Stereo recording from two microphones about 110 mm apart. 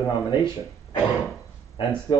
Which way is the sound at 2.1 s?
40° left (ahead or behind).